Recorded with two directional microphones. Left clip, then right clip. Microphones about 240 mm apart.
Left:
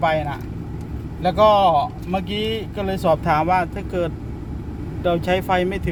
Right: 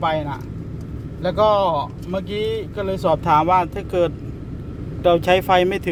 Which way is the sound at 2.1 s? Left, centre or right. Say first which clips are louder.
Right 2 dB; centre.